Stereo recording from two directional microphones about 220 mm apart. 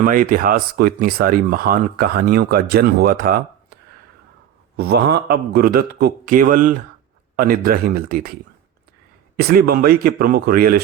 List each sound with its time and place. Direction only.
0.0 s speech: 40° right (ahead or behind)
4.8 s speech: 45° right (ahead or behind)